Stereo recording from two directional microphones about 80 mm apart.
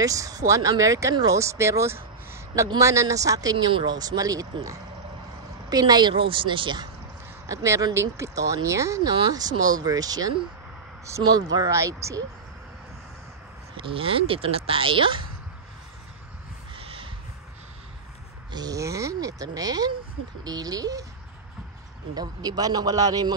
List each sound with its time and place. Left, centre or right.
0.0 s speech: right
3.5 s speech: right
7.4 s speech: right
9.3 s speech: right
13.7 s speech: right
18.5 s speech: right
18.8 s speech: right
22.1 s speech: right